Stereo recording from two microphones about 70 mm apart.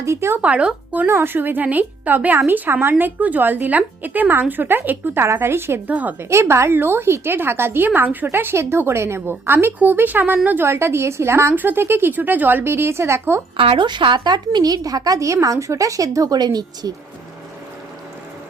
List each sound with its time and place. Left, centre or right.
0.0 s a woman's voice: right
0.4 s speech: centre
1.0 s speech: right
5.9 s speech: right
6.1 s a woman's voice: right
10.6 s a woman's voice: right
11.5 s a woman's voice: right
13.8 s a woman's voice: right
15.2 s a woman's voice: right
16.4 s a woman's voice: right